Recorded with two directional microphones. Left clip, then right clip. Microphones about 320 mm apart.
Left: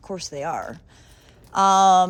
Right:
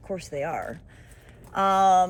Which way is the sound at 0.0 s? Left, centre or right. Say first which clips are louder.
Left 1 dB; centre.